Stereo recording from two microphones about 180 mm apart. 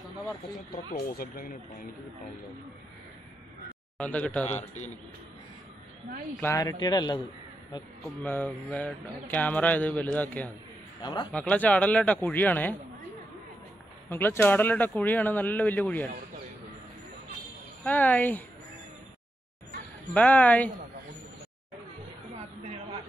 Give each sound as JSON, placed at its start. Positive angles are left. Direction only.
{"t": 0.9, "sound": "speech", "side_deg": 55}
{"t": 4.0, "sound": "speech", "side_deg": 10}
{"t": 4.5, "sound": "a man's voice", "side_deg": 40}
{"t": 6.4, "sound": "speech", "side_deg": 15}
{"t": 8.0, "sound": "speech", "side_deg": 10}
{"t": 11.0, "sound": "a man's voice", "side_deg": 25}
{"t": 11.3, "sound": "speech", "side_deg": 10}
{"t": 14.0, "sound": "speech", "side_deg": 10}
{"t": 17.8, "sound": "speech", "side_deg": 10}
{"t": 20.2, "sound": "speech", "side_deg": 10}